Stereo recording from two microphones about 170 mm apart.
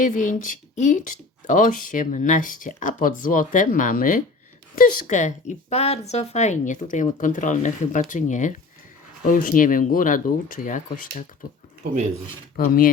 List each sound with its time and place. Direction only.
0.0 s speech: 50° left (ahead or behind)
12.5 s speech: 55° left (ahead or behind)